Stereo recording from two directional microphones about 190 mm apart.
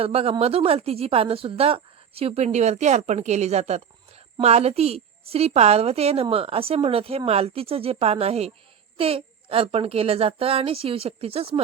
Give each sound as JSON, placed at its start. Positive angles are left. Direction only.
{"t": 0.0, "sound": "a woman's voice", "side_deg": -30}